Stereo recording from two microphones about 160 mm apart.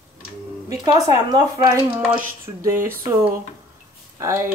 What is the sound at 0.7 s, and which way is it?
Speech, 20° right (ahead or behind).